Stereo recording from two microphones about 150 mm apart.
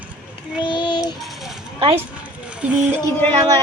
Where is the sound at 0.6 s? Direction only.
30° left (ahead or behind).